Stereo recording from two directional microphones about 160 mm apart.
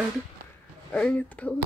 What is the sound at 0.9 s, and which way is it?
Speech, 5° left (ahead or behind).